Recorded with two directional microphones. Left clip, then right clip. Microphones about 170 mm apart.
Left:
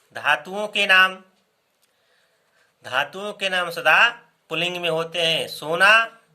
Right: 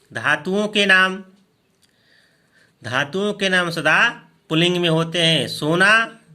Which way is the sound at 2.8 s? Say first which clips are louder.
Right 3 dB; 10° right (ahead or behind).